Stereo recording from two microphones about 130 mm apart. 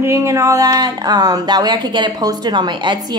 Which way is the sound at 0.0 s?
20° right (ahead or behind).